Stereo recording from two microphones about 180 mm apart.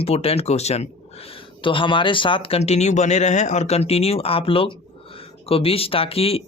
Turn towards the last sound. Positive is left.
turn(degrees=35)  # may be behind; listen again after turning